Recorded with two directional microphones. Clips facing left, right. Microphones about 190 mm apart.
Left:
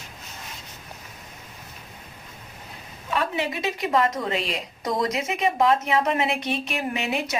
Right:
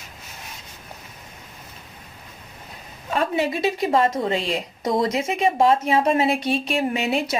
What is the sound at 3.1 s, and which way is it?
A woman's voice, 35° right (ahead or behind).